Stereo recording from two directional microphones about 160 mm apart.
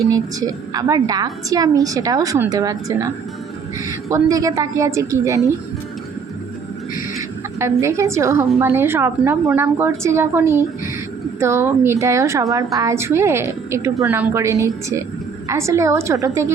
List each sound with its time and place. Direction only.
0.1 s a woman's voice: 20° right (ahead or behind)
7.2 s a woman's voice: 15° right (ahead or behind)